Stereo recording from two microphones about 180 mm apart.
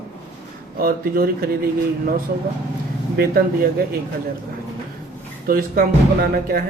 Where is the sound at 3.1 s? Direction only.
55° right (ahead or behind).